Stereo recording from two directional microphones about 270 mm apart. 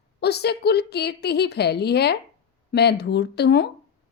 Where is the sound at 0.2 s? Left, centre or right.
Left.